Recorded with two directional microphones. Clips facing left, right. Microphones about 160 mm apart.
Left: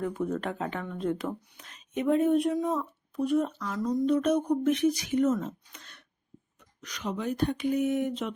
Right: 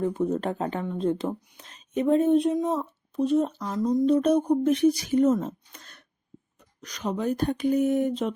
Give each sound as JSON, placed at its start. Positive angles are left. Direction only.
{"t": 0.0, "sound": "speech", "side_deg": -25}